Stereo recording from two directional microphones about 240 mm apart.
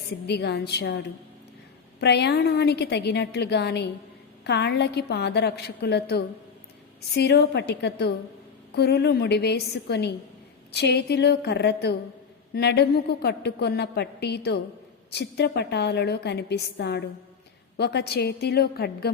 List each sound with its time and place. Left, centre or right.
0.3 s a woman's voice: left
2.0 s a woman's voice: left